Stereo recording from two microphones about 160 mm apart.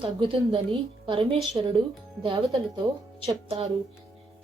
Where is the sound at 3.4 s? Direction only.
40° right (ahead or behind).